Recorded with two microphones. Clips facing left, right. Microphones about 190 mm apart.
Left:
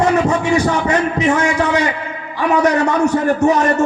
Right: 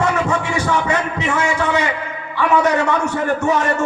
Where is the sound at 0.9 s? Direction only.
40° left (ahead or behind).